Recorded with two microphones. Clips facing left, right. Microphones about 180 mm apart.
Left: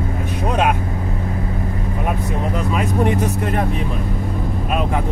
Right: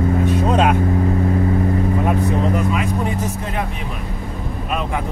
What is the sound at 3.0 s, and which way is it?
Vehicle, 65° left (ahead or behind).